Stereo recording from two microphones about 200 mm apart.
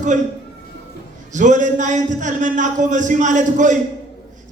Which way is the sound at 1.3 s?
40° right (ahead or behind).